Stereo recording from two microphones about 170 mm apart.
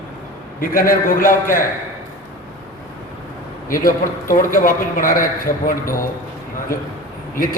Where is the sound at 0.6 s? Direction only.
55° left (ahead or behind).